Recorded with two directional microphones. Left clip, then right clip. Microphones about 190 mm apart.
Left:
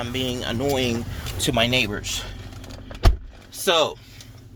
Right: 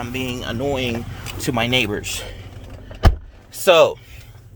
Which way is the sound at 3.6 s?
40° right (ahead or behind).